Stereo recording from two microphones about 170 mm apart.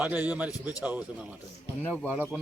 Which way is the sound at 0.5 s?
20° left (ahead or behind).